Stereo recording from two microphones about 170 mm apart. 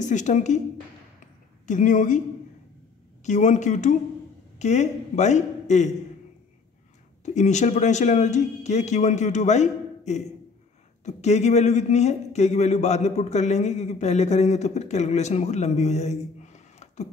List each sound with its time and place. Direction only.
0.0 s speech: 45° left (ahead or behind)
1.7 s speech: 50° left (ahead or behind)
3.3 s speech: 45° left (ahead or behind)
7.2 s speech: 45° left (ahead or behind)